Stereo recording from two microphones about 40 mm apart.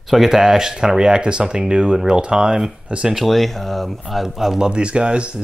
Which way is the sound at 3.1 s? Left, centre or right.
Centre.